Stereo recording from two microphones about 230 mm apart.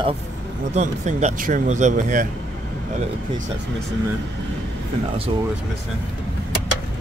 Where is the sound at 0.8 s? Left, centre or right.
Right.